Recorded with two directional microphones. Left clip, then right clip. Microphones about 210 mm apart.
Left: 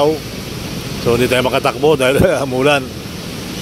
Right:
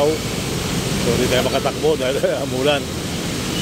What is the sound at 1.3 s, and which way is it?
Speech, 30° left (ahead or behind).